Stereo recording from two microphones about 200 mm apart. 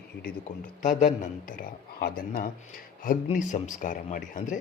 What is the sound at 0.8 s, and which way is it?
A man's voice, 40° left (ahead or behind).